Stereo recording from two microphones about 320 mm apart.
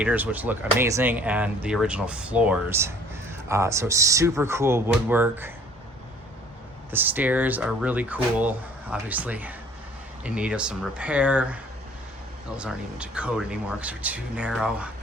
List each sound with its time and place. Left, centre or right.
0.0 s speech: centre
6.9 s speech: centre
12.5 s speech: centre